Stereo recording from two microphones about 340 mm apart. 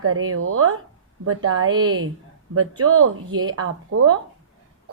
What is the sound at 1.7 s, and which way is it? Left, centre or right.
Speech, centre.